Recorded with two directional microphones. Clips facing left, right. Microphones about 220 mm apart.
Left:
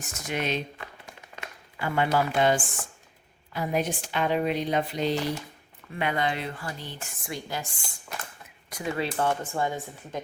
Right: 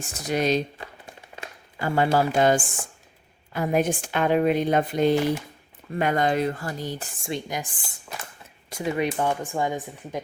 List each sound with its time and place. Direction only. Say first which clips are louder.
0.0 s speech: right 6 dB; 35° right (ahead or behind)
1.0 s a sound: right 2 dB; 30° right (ahead or behind); by 2.6 s 45° right (ahead or behind)
3.5 s speech: right 5 dB; 50° right (ahead or behind)
7.3 s speech: right 4 dB; 20° right (ahead or behind)
8.7 s speech: right 4 dB; 20° right (ahead or behind)